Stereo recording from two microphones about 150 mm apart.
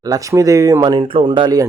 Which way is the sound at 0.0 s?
25° right (ahead or behind).